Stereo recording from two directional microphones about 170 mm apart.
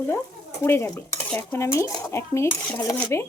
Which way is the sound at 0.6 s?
15° left (ahead or behind).